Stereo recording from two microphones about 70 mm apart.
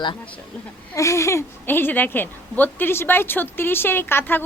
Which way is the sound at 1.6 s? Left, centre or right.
Left.